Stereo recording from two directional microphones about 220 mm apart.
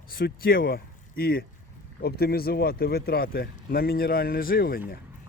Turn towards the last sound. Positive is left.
turn(degrees=40)  # may be behind; listen again after turning